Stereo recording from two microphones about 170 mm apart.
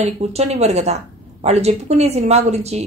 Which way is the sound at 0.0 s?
40° right (ahead or behind).